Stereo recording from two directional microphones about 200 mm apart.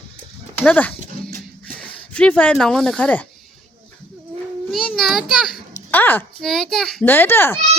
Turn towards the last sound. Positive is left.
turn(degrees=10)  # may be behind; listen again after turning